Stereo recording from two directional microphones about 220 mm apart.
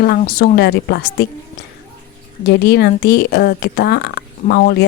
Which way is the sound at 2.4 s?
50° left (ahead or behind).